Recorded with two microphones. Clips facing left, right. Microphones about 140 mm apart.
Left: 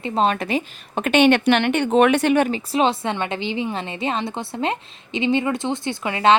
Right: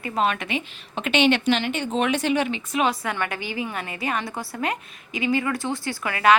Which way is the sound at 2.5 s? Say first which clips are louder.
Left 4 dB; 30° left (ahead or behind).